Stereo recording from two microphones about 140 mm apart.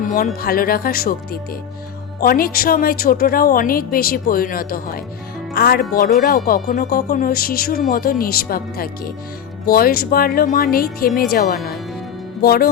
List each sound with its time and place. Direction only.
0.0 s music: 70° left (ahead or behind)
0.4 s a woman's voice: 90° left